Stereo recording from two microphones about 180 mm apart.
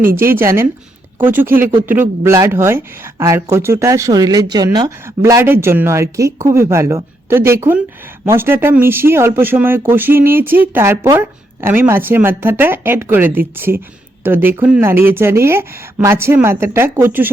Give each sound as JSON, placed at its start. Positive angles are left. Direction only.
{"t": 0.2, "sound": "speech", "side_deg": -15}